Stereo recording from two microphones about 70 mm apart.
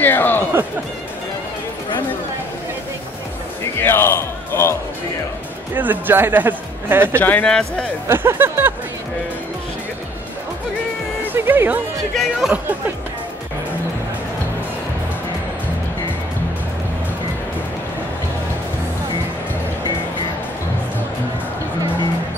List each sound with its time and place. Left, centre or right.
0.0 s a sound: left
3.8 s speech: left
5.8 s speech: right
7.2 s speech: left
7.4 s speech: centre
8.1 s a sound: right
11.3 s speech: right
12.2 s speech: centre